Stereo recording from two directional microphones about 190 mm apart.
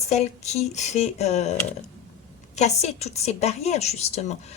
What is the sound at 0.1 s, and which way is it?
Speech, 35° left (ahead or behind).